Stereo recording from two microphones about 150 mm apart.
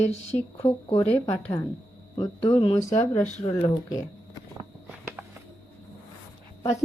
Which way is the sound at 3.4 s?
30° left (ahead or behind).